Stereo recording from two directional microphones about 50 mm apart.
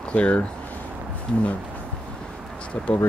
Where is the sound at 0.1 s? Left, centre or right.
Left.